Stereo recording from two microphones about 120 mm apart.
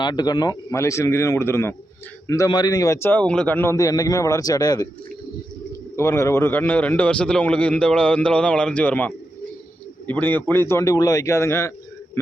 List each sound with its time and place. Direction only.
0.0 s speech: 35° left (ahead or behind)
3.1 s speech: 10° left (ahead or behind); by 4.9 s 30° left (ahead or behind)
6.0 s a man's voice: 20° left (ahead or behind)